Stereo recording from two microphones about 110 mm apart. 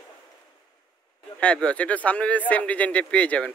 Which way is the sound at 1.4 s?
10° left (ahead or behind).